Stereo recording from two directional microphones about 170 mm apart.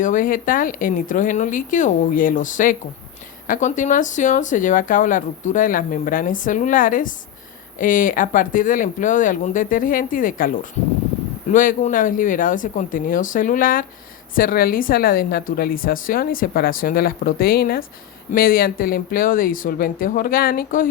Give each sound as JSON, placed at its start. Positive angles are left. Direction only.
{"t": 0.0, "sound": "speech", "side_deg": 50}